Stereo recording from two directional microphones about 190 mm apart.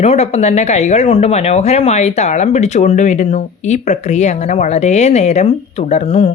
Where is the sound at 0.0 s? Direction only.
35° left (ahead or behind).